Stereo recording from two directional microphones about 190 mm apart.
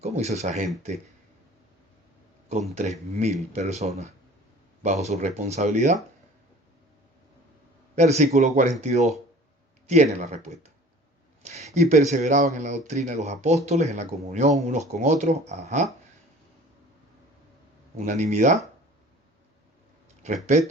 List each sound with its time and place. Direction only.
0.0 s speech: 35° right (ahead or behind)
2.7 s speech: 35° right (ahead or behind)
7.9 s speech: 35° right (ahead or behind)
17.9 s speech: 40° right (ahead or behind)
20.2 s speech: 40° right (ahead or behind)